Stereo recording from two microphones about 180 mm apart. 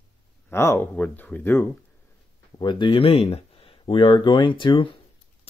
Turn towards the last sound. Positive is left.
turn(degrees=25)  # may be behind; listen again after turning